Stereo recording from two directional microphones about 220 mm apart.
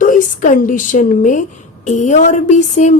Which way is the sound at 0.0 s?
35° left (ahead or behind).